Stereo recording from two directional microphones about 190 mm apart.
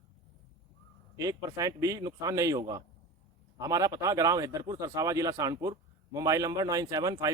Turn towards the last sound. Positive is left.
turn(degrees=-20)  # may be behind; listen again after turning